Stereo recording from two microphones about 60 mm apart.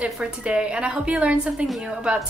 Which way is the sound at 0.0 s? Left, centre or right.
Centre.